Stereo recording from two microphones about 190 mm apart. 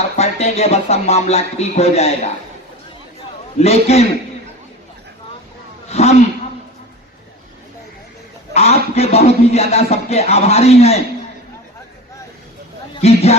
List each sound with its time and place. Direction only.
0.2 s a man's voice: 35° left (ahead or behind)
3.6 s a man's voice: 35° left (ahead or behind)
5.9 s a sound: 35° left (ahead or behind)
8.5 s a man's voice: 35° left (ahead or behind)
13.0 s a man's voice: 35° left (ahead or behind)